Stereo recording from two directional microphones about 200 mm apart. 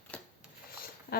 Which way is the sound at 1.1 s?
50° left (ahead or behind).